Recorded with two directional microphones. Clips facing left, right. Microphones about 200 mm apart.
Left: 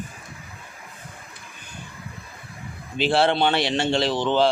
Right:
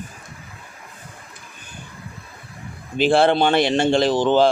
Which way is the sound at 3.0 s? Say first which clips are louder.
Right 4 dB; 50° right (ahead or behind).